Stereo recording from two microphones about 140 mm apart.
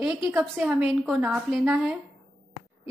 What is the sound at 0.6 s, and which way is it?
A woman's voice, 5° right (ahead or behind).